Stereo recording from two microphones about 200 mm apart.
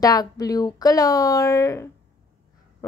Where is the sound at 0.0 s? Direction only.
20° left (ahead or behind).